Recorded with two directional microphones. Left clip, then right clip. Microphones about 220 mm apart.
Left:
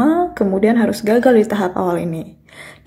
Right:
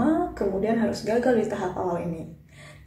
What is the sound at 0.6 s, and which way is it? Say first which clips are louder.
A woman's voice: left 11 dB; 40° left (ahead or behind).